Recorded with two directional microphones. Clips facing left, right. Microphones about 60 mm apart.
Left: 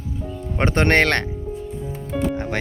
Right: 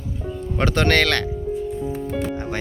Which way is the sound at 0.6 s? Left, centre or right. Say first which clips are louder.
Left 1 dB; left.